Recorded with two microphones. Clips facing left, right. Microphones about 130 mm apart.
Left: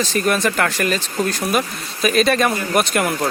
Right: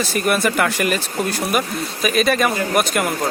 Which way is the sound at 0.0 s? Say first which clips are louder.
Even; 10° right (ahead or behind).